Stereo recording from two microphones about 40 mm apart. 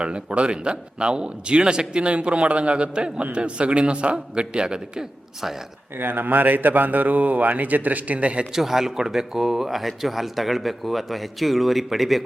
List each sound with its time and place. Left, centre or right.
0.0 s a man's voice: right
6.0 s speech: right
8.5 s speech: centre